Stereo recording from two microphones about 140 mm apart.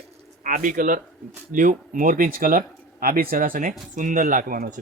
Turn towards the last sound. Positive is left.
turn(degrees=-90)